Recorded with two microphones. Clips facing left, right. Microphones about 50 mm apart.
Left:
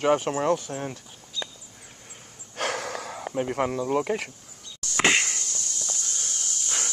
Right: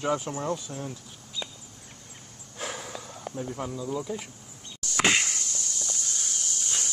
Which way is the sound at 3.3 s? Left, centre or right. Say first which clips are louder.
Left 7 dB; left.